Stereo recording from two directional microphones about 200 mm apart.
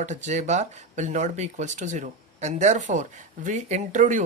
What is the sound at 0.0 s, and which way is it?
Speech, 35° right (ahead or behind).